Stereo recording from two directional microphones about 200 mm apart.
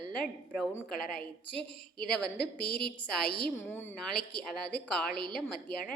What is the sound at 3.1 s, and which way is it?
A woman's voice, 5° left (ahead or behind).